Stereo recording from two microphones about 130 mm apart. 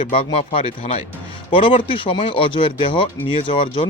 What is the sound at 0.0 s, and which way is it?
Speech, 45° left (ahead or behind).